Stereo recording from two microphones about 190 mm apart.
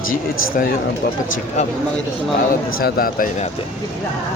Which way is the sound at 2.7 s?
50° left (ahead or behind).